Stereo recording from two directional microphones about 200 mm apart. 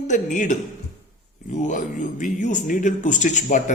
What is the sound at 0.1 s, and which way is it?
Speech, 40° left (ahead or behind).